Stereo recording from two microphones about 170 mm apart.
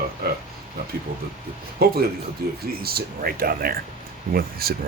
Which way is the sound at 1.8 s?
65° right (ahead or behind).